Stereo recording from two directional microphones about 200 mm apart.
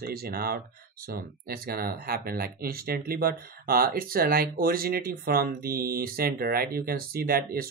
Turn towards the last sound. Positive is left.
turn(degrees=-50)  # may be behind; listen again after turning